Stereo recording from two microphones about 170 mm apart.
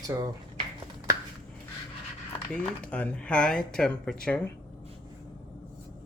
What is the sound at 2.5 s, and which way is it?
Speech, 5° left (ahead or behind).